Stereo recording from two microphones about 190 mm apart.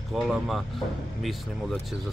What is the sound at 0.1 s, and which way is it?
Speech, centre (ahead or behind).